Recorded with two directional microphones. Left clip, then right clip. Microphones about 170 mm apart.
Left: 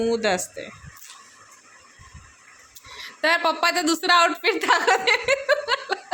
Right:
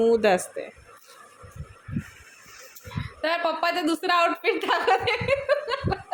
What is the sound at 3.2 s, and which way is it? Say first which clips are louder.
Speech: left 5 dB; 10° left (ahead or behind).